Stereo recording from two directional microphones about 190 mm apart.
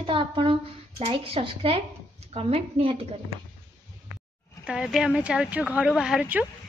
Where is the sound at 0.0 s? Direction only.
25° right (ahead or behind).